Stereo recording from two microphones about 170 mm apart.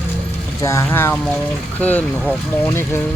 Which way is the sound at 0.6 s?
15° left (ahead or behind).